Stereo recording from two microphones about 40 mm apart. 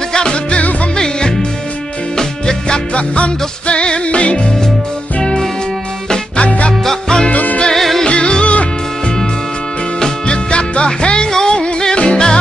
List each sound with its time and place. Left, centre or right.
0.1 s music: left
2.9 s music: left
5.2 s music: centre
6.3 s music: left
6.8 s music: centre
7.2 s music: left
7.7 s music: centre
8.0 s music: left
9.9 s music: left